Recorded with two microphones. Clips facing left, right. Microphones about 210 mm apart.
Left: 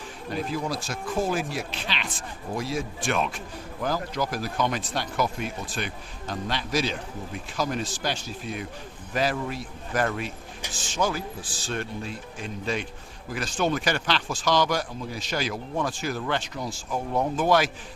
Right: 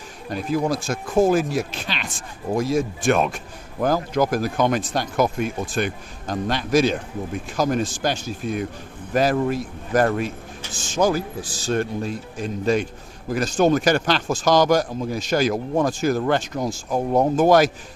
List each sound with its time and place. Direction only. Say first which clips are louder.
0.3 s speech: right 6 dB; 45° right (ahead or behind)